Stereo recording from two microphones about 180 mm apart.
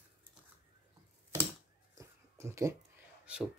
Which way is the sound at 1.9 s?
15° right (ahead or behind).